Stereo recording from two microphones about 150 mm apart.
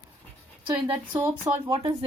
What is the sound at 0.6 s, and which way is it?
Speech, 30° right (ahead or behind).